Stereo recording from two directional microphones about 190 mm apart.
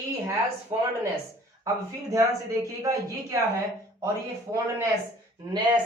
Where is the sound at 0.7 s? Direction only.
30° right (ahead or behind).